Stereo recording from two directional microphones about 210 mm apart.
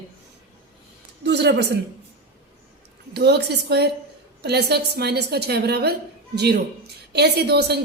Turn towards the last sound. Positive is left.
turn(degrees=-50)  # may be behind; listen again after turning